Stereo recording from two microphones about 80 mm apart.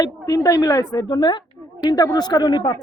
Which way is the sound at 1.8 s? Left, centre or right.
Left.